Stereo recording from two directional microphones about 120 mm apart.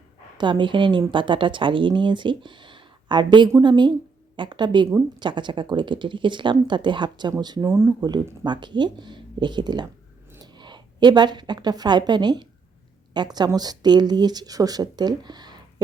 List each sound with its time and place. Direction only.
0.3 s speech: 40° right (ahead or behind)
7.6 s speech: 20° right (ahead or behind)
8.4 s a woman's voice: 40° right (ahead or behind)